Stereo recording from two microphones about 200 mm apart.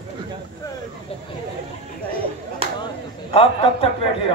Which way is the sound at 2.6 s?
30° right (ahead or behind).